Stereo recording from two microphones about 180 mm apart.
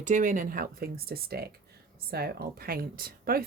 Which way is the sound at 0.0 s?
45° right (ahead or behind).